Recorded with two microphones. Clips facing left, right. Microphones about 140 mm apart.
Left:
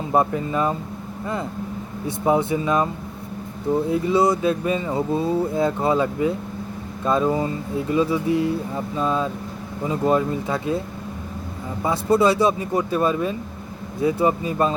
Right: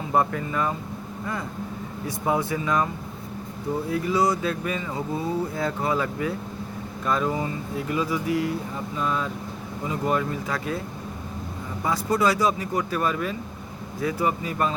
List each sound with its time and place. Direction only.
0.1 s speech: 20° left (ahead or behind)
2.0 s speech: 25° left (ahead or behind)
11.8 s speech: 25° left (ahead or behind)